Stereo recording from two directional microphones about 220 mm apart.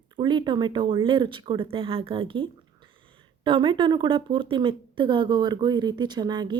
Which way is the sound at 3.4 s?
20° right (ahead or behind).